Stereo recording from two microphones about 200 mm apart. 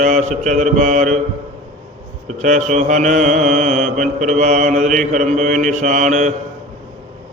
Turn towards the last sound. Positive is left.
turn(degrees=-35)  # may be behind; listen again after turning